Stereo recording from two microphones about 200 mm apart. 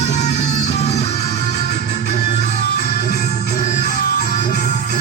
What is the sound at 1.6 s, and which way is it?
Music, 55° left (ahead or behind).